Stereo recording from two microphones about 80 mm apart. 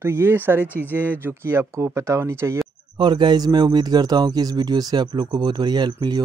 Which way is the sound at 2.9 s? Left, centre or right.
Right.